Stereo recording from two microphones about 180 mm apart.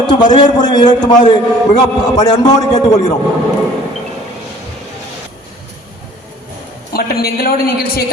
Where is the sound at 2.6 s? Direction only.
40° left (ahead or behind).